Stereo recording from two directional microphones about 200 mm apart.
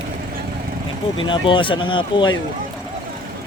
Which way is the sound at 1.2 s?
25° left (ahead or behind).